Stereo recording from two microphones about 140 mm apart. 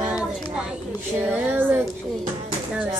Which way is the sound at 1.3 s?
10° right (ahead or behind).